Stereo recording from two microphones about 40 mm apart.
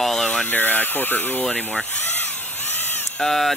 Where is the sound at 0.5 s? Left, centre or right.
Left.